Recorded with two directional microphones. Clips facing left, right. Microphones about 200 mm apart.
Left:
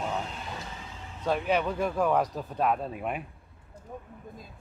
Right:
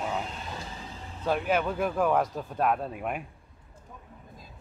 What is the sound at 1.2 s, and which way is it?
A man's voice, centre (ahead or behind).